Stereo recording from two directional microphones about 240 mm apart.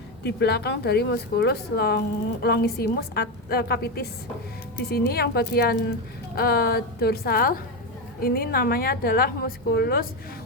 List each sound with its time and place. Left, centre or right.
0.2 s a woman's voice: left